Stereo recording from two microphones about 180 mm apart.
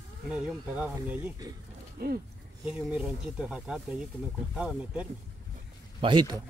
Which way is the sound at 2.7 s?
5° right (ahead or behind).